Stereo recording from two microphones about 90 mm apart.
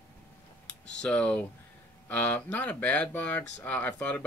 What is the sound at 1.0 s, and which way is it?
Speech, 15° left (ahead or behind).